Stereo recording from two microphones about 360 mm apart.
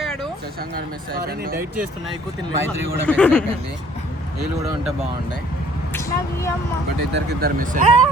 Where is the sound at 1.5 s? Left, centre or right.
Centre.